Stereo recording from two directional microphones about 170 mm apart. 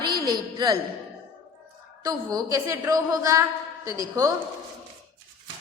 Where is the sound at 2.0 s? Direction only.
20° right (ahead or behind).